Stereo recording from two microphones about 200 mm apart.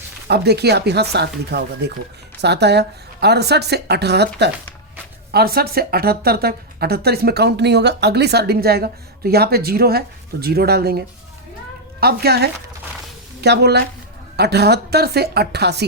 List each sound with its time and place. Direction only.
0.3 s a woman's voice: 55° right (ahead or behind)